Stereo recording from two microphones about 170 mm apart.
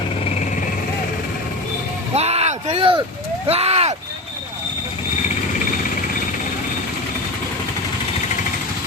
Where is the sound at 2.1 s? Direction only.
40° right (ahead or behind).